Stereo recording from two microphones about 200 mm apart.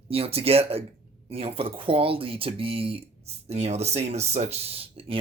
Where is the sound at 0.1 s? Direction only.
30° right (ahead or behind).